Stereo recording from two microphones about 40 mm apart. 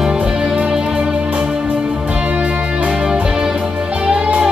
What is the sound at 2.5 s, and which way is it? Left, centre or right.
Music, centre.